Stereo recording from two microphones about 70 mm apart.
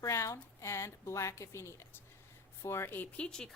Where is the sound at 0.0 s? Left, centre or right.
Left.